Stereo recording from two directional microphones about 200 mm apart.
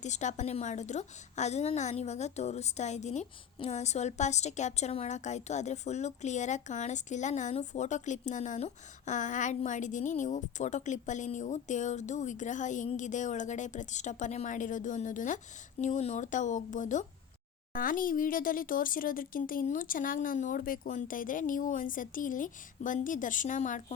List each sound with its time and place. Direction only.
0.0 s a woman's voice: 35° left (ahead or behind)